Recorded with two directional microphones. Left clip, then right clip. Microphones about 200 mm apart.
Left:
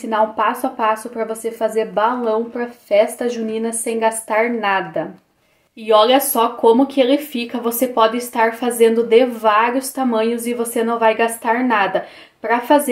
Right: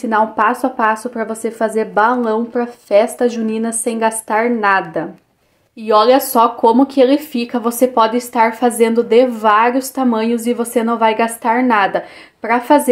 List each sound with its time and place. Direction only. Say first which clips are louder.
0.1 s speech: right 3 dB; 30° right (ahead or behind)